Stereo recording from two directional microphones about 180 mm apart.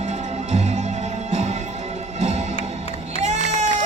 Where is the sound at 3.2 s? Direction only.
40° right (ahead or behind).